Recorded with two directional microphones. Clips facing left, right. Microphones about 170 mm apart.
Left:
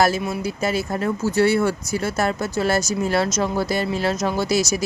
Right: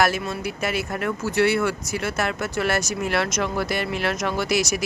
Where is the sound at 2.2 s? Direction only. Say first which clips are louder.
Left 3 dB; 30° left (ahead or behind).